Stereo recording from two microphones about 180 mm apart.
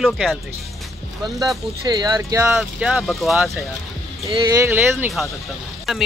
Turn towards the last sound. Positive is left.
turn(degrees=0)  # may be behind; listen again after turning